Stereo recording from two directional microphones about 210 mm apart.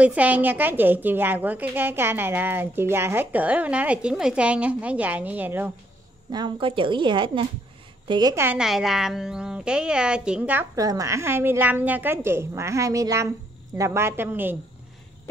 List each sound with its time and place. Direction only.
0.0 s a woman's voice: 5° right (ahead or behind)
6.3 s a woman's voice: 25° right (ahead or behind)